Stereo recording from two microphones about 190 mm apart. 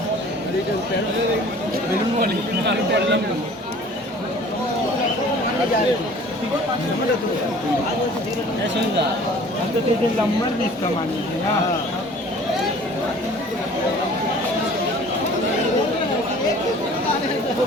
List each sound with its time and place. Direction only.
2.2 s speech: 65° right (ahead or behind)